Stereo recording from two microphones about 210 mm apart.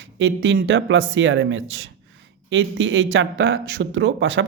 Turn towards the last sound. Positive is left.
turn(degrees=-60)  # may be behind; listen again after turning